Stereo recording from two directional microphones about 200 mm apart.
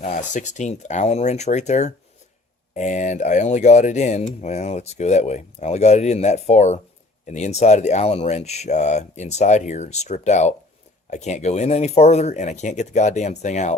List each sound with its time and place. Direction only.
0.0 s speech: 40° left (ahead or behind)